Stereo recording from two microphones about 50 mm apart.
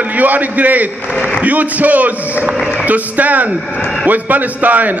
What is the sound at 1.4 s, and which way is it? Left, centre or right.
A man's voice, right.